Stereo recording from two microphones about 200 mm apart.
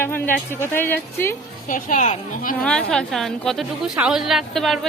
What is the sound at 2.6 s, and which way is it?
A woman's voice, 5° left (ahead or behind).